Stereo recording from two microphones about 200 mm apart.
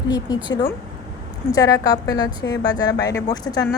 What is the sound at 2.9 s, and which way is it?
Speech, 60° left (ahead or behind).